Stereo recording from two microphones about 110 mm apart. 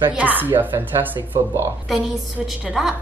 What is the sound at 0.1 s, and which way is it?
A woman's voice, 15° right (ahead or behind).